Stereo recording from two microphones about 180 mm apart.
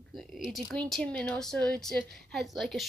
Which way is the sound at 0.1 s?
Centre (ahead or behind).